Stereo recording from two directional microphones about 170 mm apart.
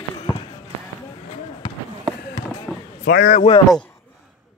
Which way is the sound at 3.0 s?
75° left (ahead or behind).